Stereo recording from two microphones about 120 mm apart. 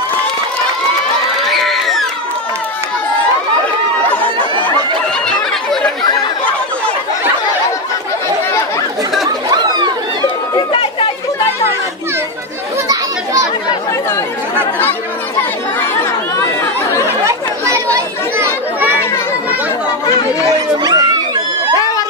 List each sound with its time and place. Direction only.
1.4 s a sound: centre (ahead or behind)
9.5 s chatter: 35° right (ahead or behind)
10.5 s chatter: 45° left (ahead or behind)
12.8 s children playing: 30° right (ahead or behind)
17.2 s chatter: 25° right (ahead or behind)
20.4 s chatter: 30° right (ahead or behind)